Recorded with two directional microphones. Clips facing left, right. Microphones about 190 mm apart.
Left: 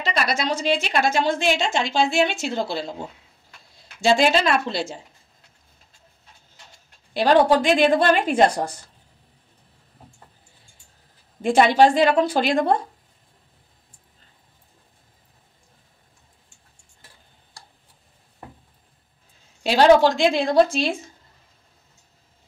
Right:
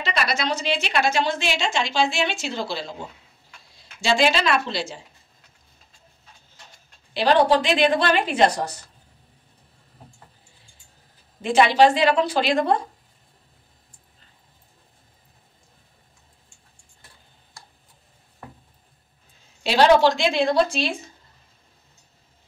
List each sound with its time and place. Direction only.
0.1 s a woman's voice: 50° left (ahead or behind)
4.0 s a woman's voice: 50° left (ahead or behind)
7.2 s a woman's voice: 45° left (ahead or behind)
11.4 s a woman's voice: 50° left (ahead or behind)
19.6 s a woman's voice: 45° left (ahead or behind)